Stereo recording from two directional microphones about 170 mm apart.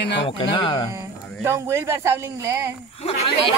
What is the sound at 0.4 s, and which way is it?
Speech, 30° left (ahead or behind).